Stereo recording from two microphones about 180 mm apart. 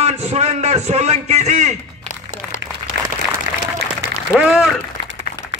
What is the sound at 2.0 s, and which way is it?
Applause, 45° left (ahead or behind).